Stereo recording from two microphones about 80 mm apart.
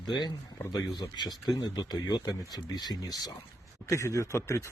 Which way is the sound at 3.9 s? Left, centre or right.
Left.